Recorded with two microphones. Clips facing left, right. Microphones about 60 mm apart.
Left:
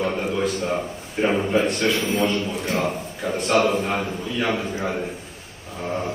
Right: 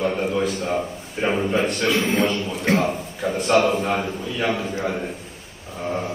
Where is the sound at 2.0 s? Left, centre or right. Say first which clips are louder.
Right 1 dB; right.